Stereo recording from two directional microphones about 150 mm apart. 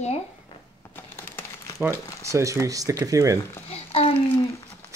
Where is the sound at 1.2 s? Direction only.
15° left (ahead or behind).